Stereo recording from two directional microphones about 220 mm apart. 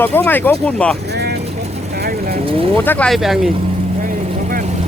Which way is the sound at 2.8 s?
10° left (ahead or behind).